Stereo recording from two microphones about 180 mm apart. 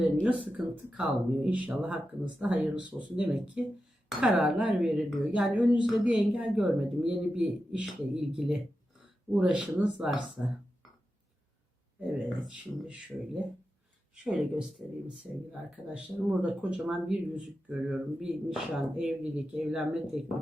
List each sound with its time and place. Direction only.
0.0 s speech: 5° right (ahead or behind)
12.3 s speech: centre (ahead or behind)